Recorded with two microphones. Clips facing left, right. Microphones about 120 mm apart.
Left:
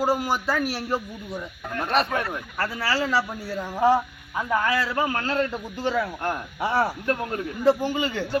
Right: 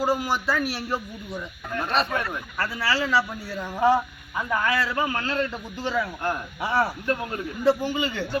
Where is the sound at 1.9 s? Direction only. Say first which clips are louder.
Left 2 dB; 55° left (ahead or behind).